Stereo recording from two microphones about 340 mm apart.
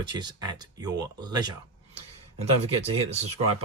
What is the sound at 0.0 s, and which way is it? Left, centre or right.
Speech, centre.